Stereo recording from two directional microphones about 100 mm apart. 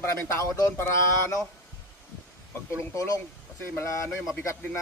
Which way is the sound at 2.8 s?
35° left (ahead or behind).